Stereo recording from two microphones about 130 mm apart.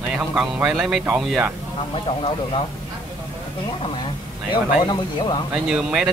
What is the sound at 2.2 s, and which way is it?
Speech, 45° left (ahead or behind).